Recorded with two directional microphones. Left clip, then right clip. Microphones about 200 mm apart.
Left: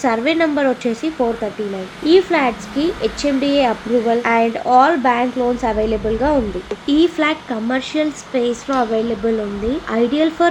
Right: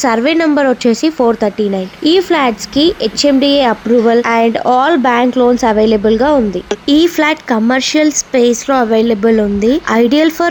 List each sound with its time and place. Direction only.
0.0 s a woman's voice: 35° right (ahead or behind)
6.8 s a woman's voice: 30° right (ahead or behind)